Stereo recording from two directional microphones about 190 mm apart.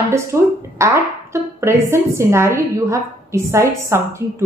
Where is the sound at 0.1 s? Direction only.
15° right (ahead or behind).